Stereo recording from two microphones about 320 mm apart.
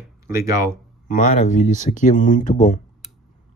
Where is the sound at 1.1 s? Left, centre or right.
Left.